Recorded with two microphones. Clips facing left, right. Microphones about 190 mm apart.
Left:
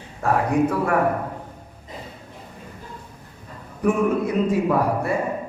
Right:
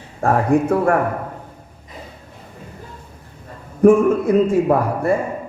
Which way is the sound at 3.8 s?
50° right (ahead or behind).